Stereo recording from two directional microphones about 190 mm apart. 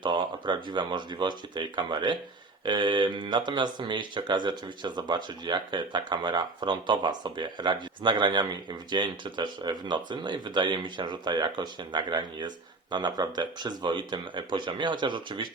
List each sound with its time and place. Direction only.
0.0 s speech: 25° right (ahead or behind)